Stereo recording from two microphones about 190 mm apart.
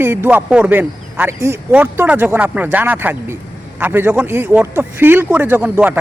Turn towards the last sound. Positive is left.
turn(degrees=-10)  # may be behind; listen again after turning